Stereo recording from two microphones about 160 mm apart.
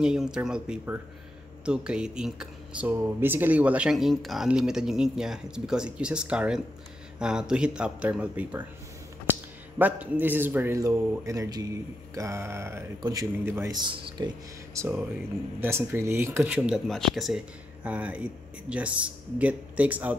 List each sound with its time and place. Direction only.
0.0 s speech: 5° right (ahead or behind)